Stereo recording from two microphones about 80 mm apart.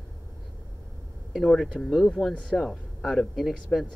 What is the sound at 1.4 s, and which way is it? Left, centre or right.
Speech, centre.